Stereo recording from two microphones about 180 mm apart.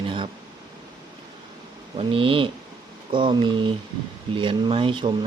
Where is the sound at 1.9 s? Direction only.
30° right (ahead or behind).